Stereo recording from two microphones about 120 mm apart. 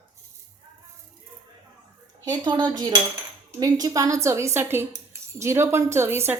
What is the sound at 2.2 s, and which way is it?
Cutlery, 35° right (ahead or behind).